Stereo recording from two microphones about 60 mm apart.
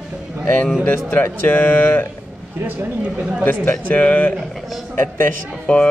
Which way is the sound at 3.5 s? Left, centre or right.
Left.